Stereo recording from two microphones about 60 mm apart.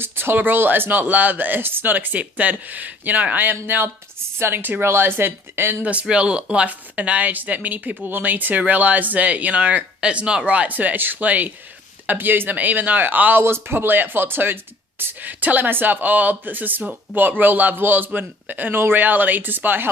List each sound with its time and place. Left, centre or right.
0.0 s speech: right
5.8 s speech: right
13.4 s speech: right